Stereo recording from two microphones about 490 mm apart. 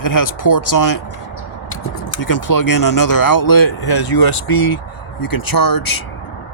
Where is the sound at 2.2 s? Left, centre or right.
Left.